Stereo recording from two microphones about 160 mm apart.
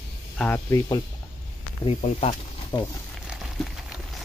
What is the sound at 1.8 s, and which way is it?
Speech, 40° left (ahead or behind).